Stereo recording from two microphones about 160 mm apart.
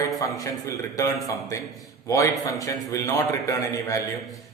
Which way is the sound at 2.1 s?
20° left (ahead or behind).